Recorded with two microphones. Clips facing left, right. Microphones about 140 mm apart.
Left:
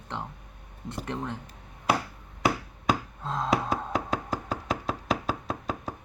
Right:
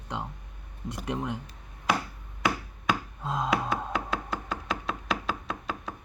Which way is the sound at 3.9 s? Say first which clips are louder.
Left 2 dB; 40° left (ahead or behind).